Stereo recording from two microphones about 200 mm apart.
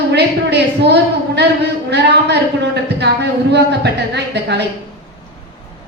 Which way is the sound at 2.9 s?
60° right (ahead or behind).